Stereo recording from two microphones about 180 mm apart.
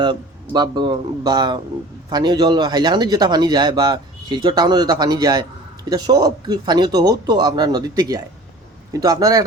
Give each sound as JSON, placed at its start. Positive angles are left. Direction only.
{"t": 0.0, "sound": "speech", "side_deg": -25}